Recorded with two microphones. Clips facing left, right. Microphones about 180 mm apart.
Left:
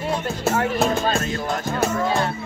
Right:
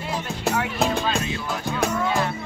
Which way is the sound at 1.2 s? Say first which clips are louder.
Left 3 dB; 45° left (ahead or behind).